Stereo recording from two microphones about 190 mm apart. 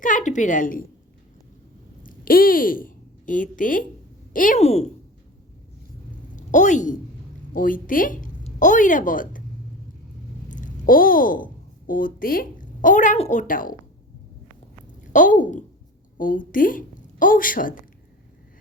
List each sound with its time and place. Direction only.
0.0 s a woman's voice: 40° left (ahead or behind)
2.0 s a woman's voice: 50° left (ahead or behind)
6.3 s a woman's voice: 40° left (ahead or behind)
10.5 s a woman's voice: 45° left (ahead or behind)
15.1 s a woman's voice: 45° left (ahead or behind)